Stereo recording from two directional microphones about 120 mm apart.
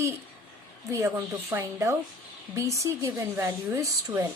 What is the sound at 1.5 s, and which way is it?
Speech, 25° right (ahead or behind).